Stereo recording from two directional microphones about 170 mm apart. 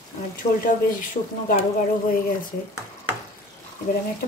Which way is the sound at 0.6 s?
55° left (ahead or behind).